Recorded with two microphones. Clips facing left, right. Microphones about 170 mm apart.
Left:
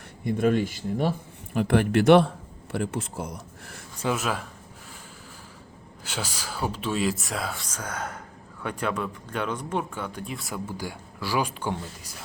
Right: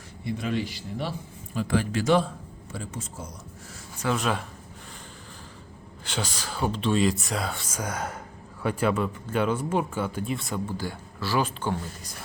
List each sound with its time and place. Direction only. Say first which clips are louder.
0.3 s speech: left 6 dB; 50° left (ahead or behind)
1.5 s speech: left 5 dB; 60° left (ahead or behind)
4.1 s speech: right 2 dB; 5° left (ahead or behind)
6.1 s speech: right 1 dB; 10° left (ahead or behind)
7.7 s speech: right 2 dB; 10° right (ahead or behind); by 12.1 s 10° left (ahead or behind)